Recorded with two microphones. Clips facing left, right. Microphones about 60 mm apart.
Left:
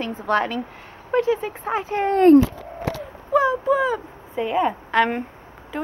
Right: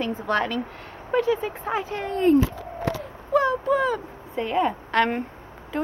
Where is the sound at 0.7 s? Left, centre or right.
Centre.